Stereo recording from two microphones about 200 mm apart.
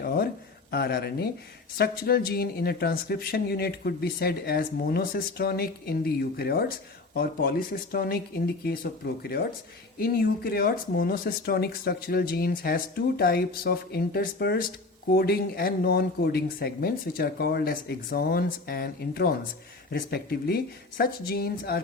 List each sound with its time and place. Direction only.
0.0 s a sound: 50° left (ahead or behind)
0.7 s speech: 50° left (ahead or behind)
10.0 s speech: 50° left (ahead or behind)